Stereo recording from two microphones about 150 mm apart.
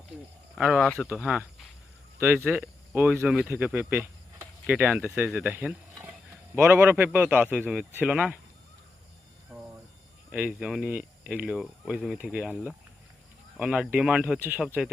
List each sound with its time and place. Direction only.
0.5 s speech: 5° right (ahead or behind)
9.5 s cricket: 5° right (ahead or behind)
10.3 s speech: 5° right (ahead or behind)